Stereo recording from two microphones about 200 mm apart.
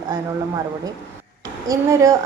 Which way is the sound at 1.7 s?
15° right (ahead or behind).